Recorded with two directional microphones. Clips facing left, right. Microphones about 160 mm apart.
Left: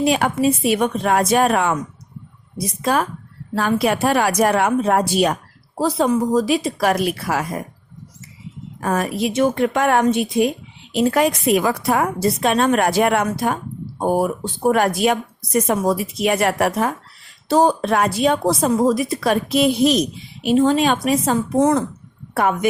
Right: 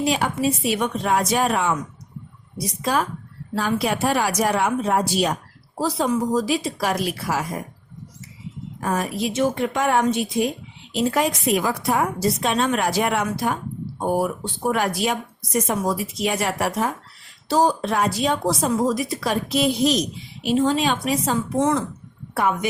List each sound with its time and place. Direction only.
0.0 s a woman's voice: 55° left (ahead or behind)
8.8 s a woman's voice: 60° left (ahead or behind)